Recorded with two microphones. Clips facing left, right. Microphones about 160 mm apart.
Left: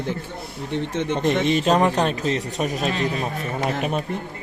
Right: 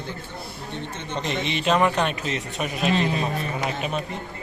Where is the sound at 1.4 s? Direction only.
45° left (ahead or behind).